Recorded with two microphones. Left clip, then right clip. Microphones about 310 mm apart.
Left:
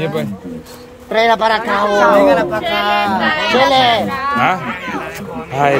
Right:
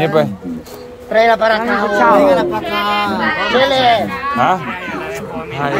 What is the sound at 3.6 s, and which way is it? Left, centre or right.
Speech, left.